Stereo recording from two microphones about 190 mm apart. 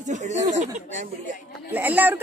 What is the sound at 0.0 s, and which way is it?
Speech, 40° right (ahead or behind).